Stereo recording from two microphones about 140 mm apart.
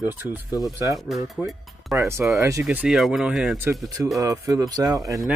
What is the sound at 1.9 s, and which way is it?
Speech, 20° right (ahead or behind).